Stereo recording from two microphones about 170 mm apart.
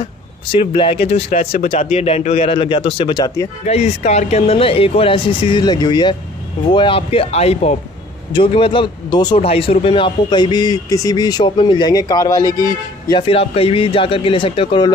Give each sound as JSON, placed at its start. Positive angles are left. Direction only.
{"t": 0.0, "sound": "speech", "side_deg": 30}
{"t": 1.3, "sound": "speech", "side_deg": 55}
{"t": 1.7, "sound": "speech", "side_deg": 40}
{"t": 13.3, "sound": "speech", "side_deg": 35}